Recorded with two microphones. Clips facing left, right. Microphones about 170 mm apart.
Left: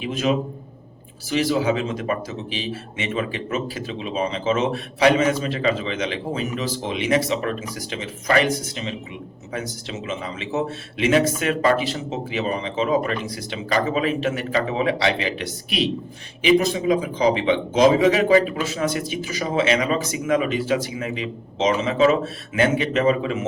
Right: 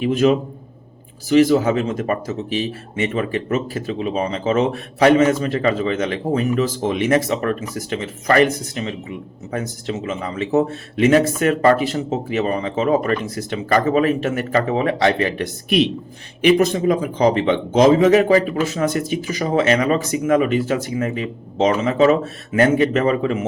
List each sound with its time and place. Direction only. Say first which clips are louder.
0.0 s speech: right 6 dB; 50° right (ahead or behind)